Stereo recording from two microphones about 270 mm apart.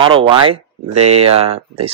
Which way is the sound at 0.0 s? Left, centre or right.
Centre.